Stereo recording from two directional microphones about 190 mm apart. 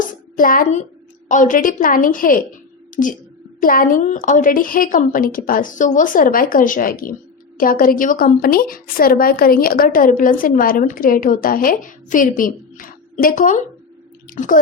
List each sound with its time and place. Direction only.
0.1 s child singing: 45° left (ahead or behind)
1.3 s a woman's voice: 45° left (ahead or behind)